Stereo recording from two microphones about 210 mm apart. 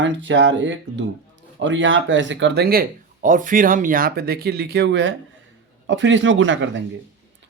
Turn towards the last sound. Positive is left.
turn(degrees=-60)  # may be behind; listen again after turning